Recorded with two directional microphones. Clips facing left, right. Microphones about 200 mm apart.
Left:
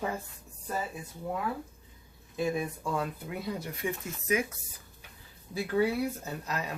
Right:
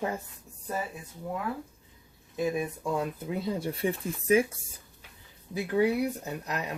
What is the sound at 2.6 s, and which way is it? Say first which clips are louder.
Speech: right 2 dB; 20° right (ahead or behind).